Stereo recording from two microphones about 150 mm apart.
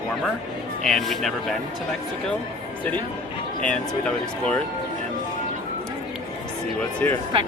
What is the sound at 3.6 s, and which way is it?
Speech, 10° left (ahead or behind).